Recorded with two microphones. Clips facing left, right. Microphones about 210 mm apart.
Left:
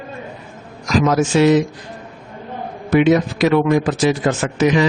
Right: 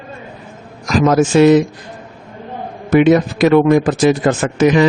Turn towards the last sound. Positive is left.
turn(degrees=-55)  # may be behind; listen again after turning